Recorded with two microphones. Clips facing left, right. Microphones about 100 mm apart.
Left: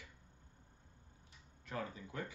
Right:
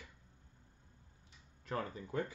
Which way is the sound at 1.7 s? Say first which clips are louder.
Right 4 dB; 40° right (ahead or behind).